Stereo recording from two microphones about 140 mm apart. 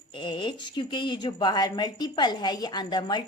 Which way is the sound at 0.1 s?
35° left (ahead or behind).